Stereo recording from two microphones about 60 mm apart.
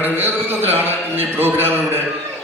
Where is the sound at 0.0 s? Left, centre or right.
Right.